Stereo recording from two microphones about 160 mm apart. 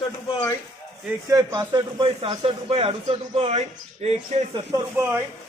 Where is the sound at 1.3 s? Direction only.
25° right (ahead or behind).